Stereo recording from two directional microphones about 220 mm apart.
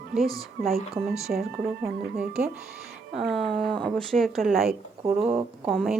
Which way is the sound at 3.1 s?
Centre (ahead or behind).